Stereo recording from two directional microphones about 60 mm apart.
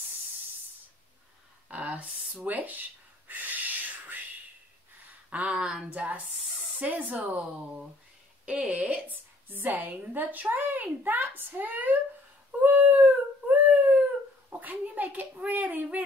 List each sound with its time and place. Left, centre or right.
1.7 s a sound: right
2.0 s speech: centre
2.4 s speech: right
3.3 s a sound: right
5.3 s speech: right
5.9 s speech: right
6.3 s a sound: centre
6.8 s a woman's voice: right
12.6 s dog: right
14.5 s speech: right